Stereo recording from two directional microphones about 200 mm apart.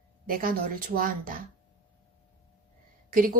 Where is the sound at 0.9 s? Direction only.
45° right (ahead or behind).